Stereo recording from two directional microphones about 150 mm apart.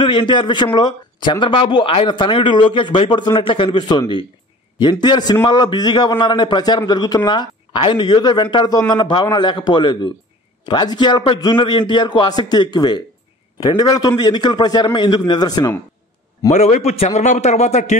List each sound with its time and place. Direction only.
0.0 s a man's voice: 35° left (ahead or behind)
16.4 s a man's voice: 50° left (ahead or behind)